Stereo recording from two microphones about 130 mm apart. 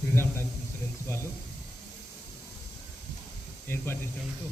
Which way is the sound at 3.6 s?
20° left (ahead or behind).